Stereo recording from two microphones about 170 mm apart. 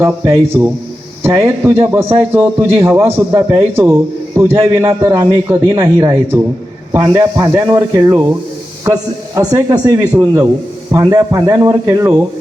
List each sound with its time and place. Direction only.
0.0 s a man's voice: 15° right (ahead or behind)